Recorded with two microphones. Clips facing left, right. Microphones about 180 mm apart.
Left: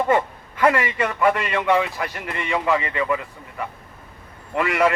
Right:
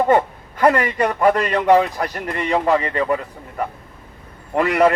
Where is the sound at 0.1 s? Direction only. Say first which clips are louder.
Right 4 dB; 35° right (ahead or behind).